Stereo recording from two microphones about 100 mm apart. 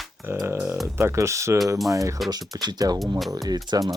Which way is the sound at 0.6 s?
Centre (ahead or behind).